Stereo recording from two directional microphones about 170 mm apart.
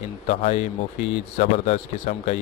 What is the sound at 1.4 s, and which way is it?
Speech, 40° left (ahead or behind).